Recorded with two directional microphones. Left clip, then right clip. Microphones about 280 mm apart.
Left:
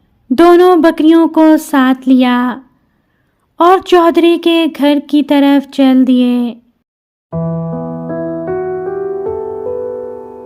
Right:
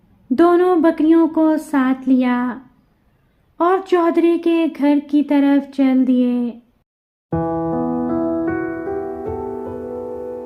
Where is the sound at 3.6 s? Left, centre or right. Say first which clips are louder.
Left 8 dB; left.